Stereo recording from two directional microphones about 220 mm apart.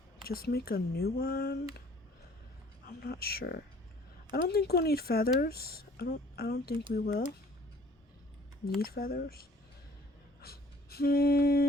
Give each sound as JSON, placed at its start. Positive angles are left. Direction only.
{"t": 0.3, "sound": "speech", "side_deg": 45}
{"t": 2.8, "sound": "speech", "side_deg": 45}
{"t": 8.6, "sound": "speech", "side_deg": 45}
{"t": 10.4, "sound": "a sound", "side_deg": 45}